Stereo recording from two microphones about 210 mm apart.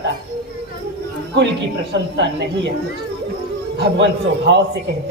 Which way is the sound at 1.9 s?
55° right (ahead or behind).